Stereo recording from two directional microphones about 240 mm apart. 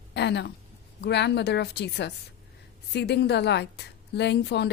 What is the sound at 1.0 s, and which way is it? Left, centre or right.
A woman's voice, left.